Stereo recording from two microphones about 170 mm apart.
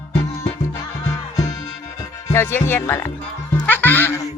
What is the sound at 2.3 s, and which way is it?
Speech, 15° left (ahead or behind).